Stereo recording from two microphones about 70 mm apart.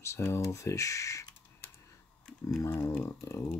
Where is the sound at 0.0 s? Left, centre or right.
Left.